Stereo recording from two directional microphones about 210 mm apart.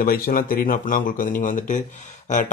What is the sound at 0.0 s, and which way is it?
Speech, 45° left (ahead or behind).